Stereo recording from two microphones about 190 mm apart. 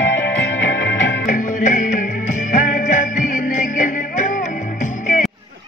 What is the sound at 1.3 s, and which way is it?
Music, 40° left (ahead or behind).